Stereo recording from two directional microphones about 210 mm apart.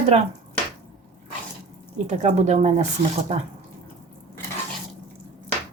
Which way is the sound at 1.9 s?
35° right (ahead or behind).